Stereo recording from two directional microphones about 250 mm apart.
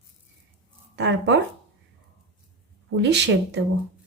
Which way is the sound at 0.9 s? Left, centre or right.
Right.